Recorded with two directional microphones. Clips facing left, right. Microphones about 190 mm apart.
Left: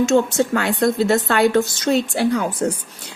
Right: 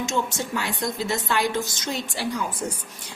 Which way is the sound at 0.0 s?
65° left (ahead or behind).